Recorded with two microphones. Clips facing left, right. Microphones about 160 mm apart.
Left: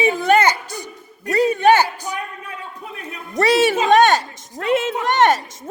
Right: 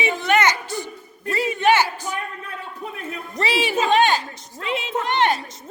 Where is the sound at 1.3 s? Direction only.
40° left (ahead or behind).